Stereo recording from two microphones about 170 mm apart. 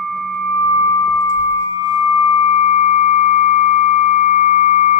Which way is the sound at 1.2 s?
25° left (ahead or behind).